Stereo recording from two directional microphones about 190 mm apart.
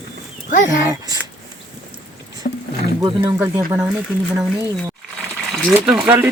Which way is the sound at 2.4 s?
50° left (ahead or behind).